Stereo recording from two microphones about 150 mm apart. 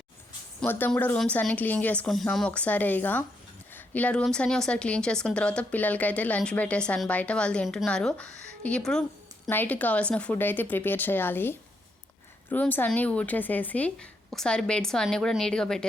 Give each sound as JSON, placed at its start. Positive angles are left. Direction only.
{"t": 0.6, "sound": "a woman's voice", "side_deg": 10}